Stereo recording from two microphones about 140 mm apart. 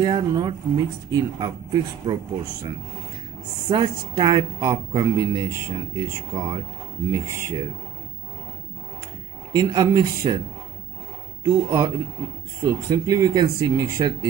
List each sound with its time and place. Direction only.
0.0 s a woman's voice: 30° right (ahead or behind)
3.6 s a woman's voice: 30° right (ahead or behind)
9.5 s a woman's voice: 30° right (ahead or behind)
11.4 s speech: 30° right (ahead or behind)